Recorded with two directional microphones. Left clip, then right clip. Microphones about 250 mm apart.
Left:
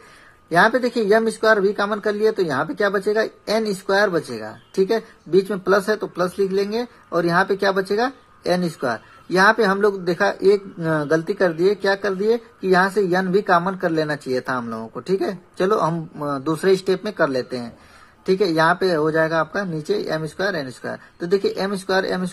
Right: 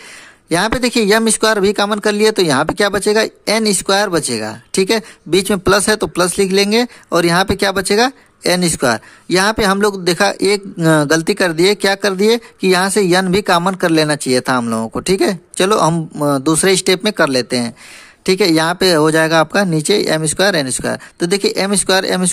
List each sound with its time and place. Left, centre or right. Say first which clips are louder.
0.5 s speech: right 1 dB; right